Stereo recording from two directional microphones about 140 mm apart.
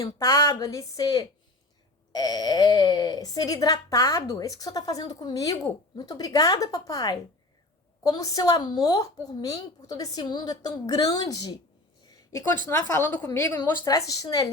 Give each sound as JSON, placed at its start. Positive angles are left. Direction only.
{"t": 0.0, "sound": "speech", "side_deg": 20}
{"t": 12.6, "sound": "a woman's voice", "side_deg": 20}